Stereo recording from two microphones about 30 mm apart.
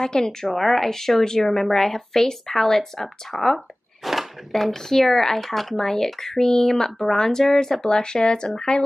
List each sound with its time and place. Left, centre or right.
0.0 s speech: centre
0.6 s speech: centre
4.0 s a sound: centre
4.5 s speech: centre; by 8.8 s left